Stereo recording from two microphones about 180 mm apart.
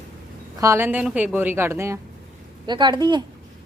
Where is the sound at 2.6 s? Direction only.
25° right (ahead or behind).